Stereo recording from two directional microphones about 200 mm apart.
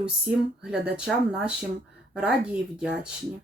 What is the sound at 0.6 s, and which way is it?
Speech, 5° right (ahead or behind).